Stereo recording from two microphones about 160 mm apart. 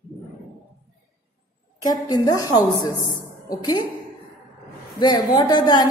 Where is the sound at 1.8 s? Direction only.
25° left (ahead or behind).